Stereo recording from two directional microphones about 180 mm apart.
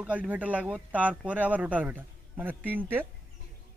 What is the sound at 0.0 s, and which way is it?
Speech, 5° right (ahead or behind).